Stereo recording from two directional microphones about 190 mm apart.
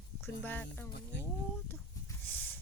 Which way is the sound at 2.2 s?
10° left (ahead or behind).